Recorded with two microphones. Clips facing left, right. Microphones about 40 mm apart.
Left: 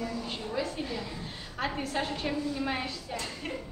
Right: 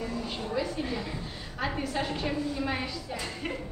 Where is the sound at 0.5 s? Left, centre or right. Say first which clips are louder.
Right 2 dB; centre.